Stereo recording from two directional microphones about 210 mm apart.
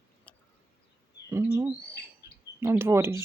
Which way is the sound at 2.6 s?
10° right (ahead or behind).